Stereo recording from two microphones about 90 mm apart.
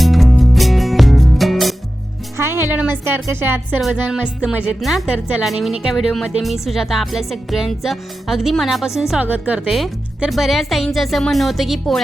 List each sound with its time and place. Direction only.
0.0 s music: centre (ahead or behind)
2.4 s music: 30° right (ahead or behind)
3.0 s a woman's voice: 25° right (ahead or behind)
3.8 s speech: centre (ahead or behind)
4.4 s a woman's voice: 10° right (ahead or behind)
4.8 s speech: centre (ahead or behind)
9.2 s a woman's voice: 15° right (ahead or behind)
9.6 s speech: centre (ahead or behind)